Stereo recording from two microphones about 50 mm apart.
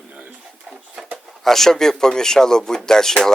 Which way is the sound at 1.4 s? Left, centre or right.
Centre.